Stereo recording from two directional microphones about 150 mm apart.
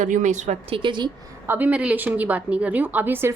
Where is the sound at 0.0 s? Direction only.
55° right (ahead or behind).